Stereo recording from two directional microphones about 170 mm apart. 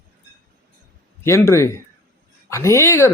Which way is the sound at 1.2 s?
15° left (ahead or behind).